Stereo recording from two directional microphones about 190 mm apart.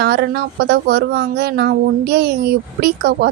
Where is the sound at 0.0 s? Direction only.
60° right (ahead or behind).